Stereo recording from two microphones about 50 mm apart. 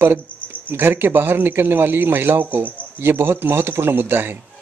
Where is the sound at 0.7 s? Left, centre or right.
Right.